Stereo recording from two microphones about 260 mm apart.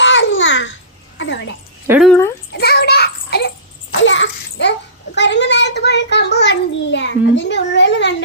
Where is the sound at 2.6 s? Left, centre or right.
Left.